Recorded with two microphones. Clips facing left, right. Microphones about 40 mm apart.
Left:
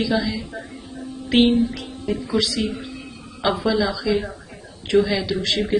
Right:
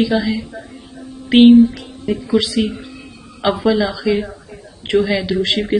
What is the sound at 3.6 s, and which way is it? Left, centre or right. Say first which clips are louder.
A woman's voice: right 6 dB; right.